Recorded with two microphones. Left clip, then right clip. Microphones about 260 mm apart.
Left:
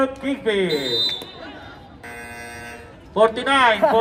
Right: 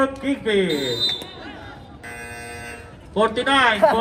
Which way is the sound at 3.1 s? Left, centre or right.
Left.